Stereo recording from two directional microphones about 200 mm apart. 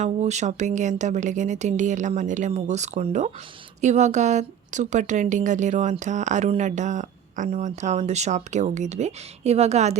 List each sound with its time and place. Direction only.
0.0 s speech: 35° right (ahead or behind)